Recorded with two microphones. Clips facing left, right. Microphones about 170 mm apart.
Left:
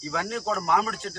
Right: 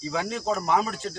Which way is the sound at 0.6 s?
25° right (ahead or behind).